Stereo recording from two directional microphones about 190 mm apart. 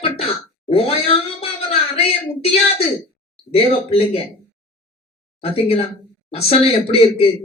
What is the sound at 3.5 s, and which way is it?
Speech, 30° left (ahead or behind).